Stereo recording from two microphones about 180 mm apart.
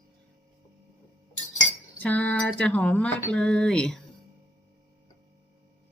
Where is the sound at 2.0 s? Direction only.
10° left (ahead or behind).